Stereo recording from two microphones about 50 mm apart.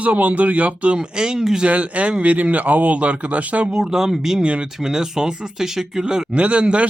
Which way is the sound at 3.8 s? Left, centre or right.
Centre.